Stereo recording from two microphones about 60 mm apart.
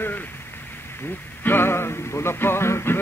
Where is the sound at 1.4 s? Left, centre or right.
Left.